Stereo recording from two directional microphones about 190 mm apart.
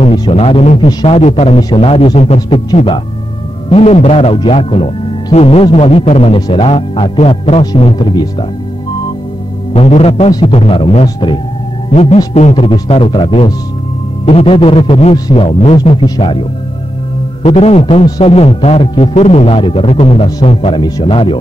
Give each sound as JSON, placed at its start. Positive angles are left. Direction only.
{"t": 0.0, "sound": "speech", "side_deg": 30}
{"t": 9.8, "sound": "speech", "side_deg": 35}
{"t": 17.4, "sound": "speech", "side_deg": 30}
{"t": 18.0, "sound": "speech", "side_deg": 20}
{"t": 18.3, "sound": "speech", "side_deg": 30}